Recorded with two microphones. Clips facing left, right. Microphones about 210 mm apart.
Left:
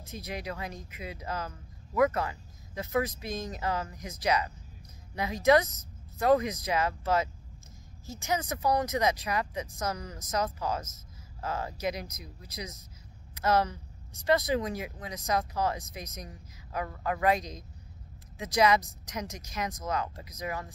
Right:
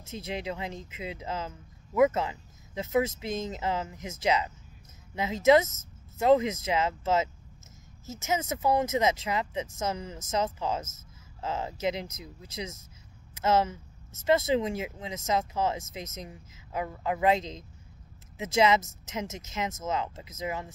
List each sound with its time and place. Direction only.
0.0 s speech: 25° right (ahead or behind)